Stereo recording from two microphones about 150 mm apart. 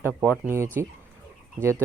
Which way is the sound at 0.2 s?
15° right (ahead or behind).